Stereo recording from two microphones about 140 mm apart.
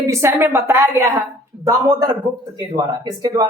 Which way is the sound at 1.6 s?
30° right (ahead or behind).